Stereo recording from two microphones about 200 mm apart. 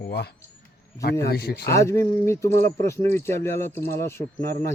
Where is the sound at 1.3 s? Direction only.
50° left (ahead or behind).